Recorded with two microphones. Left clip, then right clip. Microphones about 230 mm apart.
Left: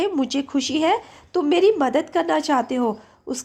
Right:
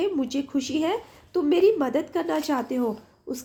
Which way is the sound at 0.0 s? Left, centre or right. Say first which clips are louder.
Left 4 dB; left.